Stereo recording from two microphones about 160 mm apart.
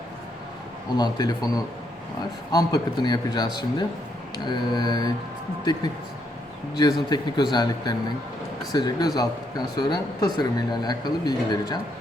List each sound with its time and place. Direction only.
0.9 s speech: 25° left (ahead or behind)
6.7 s speech: 25° left (ahead or behind)